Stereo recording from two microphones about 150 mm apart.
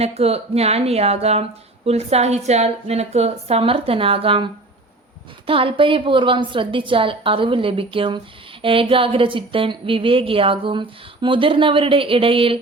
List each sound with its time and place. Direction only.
0.0 s speech: 45° right (ahead or behind)
5.5 s speech: 35° right (ahead or behind)